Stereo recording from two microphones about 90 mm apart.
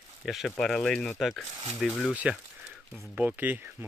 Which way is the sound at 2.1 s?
15° right (ahead or behind).